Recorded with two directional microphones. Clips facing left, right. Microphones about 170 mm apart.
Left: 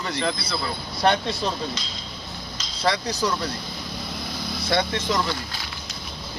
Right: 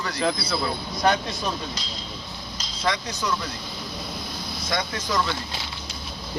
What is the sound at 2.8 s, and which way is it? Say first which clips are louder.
Speech: left 3 dB; 35° left (ahead or behind).